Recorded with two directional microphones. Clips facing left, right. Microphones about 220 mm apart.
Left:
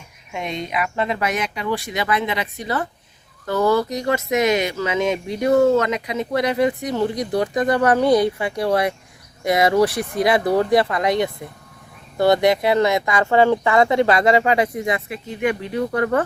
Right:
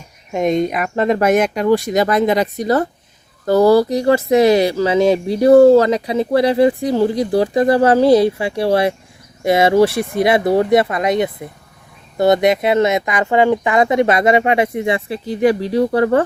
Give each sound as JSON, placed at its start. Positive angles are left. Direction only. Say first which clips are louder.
{"t": 0.3, "sound": "speech", "louder": "right 11 dB", "side_deg": -45}